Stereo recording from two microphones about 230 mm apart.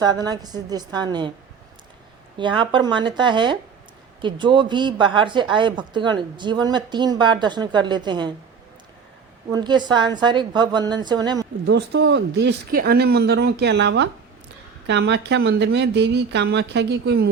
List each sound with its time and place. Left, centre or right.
0.0 s a woman's voice: centre
2.4 s speech: right
9.5 s speech: centre
11.6 s speech: right